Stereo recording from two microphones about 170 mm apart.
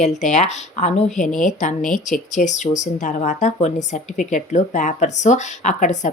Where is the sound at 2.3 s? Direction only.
45° left (ahead or behind).